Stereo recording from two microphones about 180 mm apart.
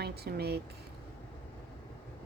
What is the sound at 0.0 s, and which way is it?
Speech, 65° right (ahead or behind).